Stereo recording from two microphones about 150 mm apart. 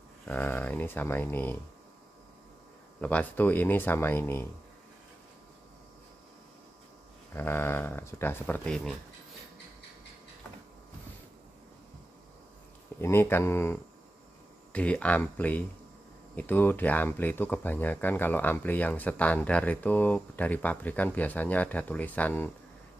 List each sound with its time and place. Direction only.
0.2 s speech: 10° left (ahead or behind)
3.0 s speech: 10° left (ahead or behind)
7.3 s speech: 15° left (ahead or behind)
13.0 s speech: 15° left (ahead or behind)